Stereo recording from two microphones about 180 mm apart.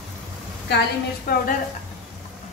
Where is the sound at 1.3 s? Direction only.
55° left (ahead or behind).